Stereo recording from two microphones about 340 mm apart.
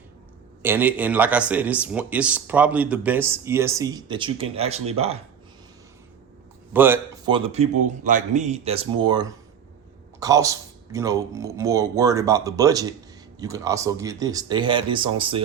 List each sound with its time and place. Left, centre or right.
0.6 s speech: centre
6.7 s speech: centre